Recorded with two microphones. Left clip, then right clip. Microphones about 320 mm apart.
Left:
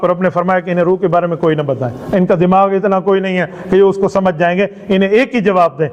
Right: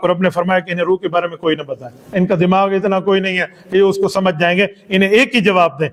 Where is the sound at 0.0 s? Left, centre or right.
Right.